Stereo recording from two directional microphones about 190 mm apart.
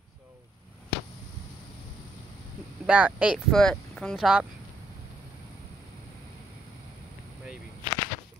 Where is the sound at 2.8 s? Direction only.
5° right (ahead or behind).